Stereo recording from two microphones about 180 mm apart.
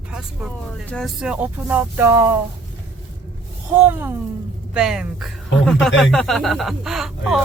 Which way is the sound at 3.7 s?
10° right (ahead or behind).